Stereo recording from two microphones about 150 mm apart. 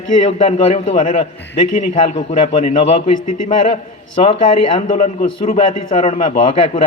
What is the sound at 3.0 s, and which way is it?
Speech, 40° left (ahead or behind).